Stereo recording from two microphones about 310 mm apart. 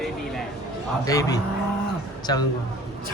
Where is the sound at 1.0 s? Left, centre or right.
Centre.